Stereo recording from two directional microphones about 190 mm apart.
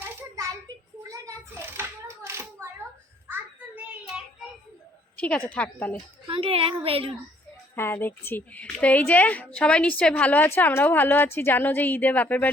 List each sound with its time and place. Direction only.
0.0 s a sound: 10° right (ahead or behind)
3.2 s child singing: 10° right (ahead or behind)
5.1 s a woman's voice: 10° left (ahead or behind)
6.2 s a woman's voice: 30° right (ahead or behind)
7.8 s a woman's voice: 10° left (ahead or behind)